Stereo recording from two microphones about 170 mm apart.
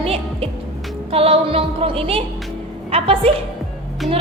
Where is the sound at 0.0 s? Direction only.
35° right (ahead or behind).